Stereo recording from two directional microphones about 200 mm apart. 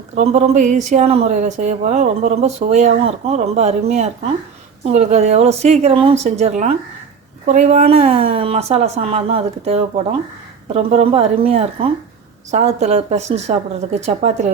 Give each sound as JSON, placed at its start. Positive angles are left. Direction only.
{"t": 0.2, "sound": "a woman's voice", "side_deg": -35}